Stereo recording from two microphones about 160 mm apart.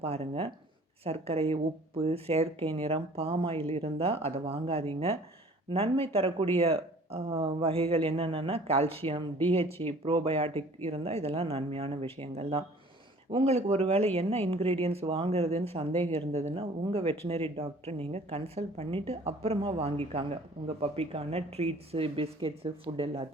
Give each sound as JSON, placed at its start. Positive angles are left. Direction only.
{"t": 0.0, "sound": "speech", "side_deg": -40}